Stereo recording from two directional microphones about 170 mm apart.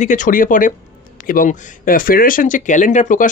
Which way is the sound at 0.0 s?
45° left (ahead or behind).